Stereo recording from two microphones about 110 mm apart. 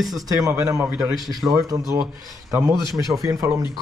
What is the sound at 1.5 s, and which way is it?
Speech, 30° right (ahead or behind).